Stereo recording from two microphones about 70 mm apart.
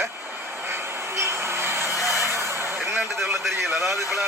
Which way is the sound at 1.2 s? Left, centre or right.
Right.